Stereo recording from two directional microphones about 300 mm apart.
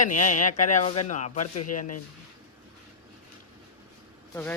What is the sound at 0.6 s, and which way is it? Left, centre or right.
Speech, left.